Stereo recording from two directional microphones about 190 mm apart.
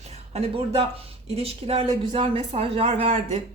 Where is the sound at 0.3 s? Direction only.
30° right (ahead or behind).